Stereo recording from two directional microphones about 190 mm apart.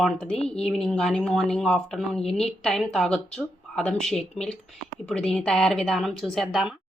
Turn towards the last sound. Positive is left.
turn(degrees=0)  # may be behind; listen again after turning